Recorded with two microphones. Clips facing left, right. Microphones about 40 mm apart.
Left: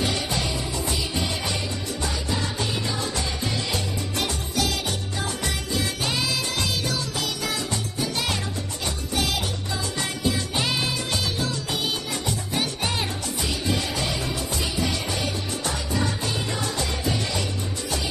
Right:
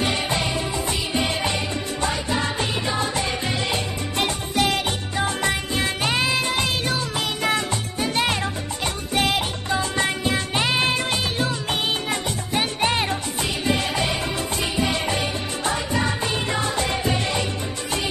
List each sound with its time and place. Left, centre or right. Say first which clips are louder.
0.0 s music: right 3 dB; right